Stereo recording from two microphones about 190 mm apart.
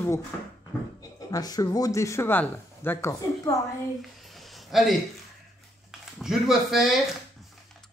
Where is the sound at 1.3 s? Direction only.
20° left (ahead or behind).